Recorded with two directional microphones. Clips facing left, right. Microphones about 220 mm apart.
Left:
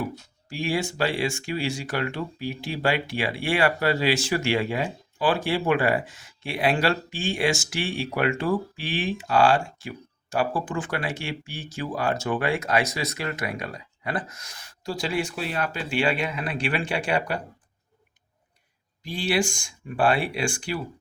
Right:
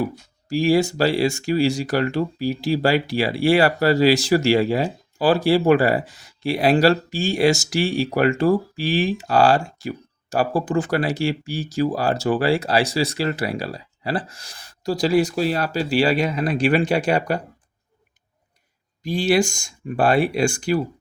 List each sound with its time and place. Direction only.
0.4 s speech: 40° right (ahead or behind)
19.0 s speech: 40° right (ahead or behind)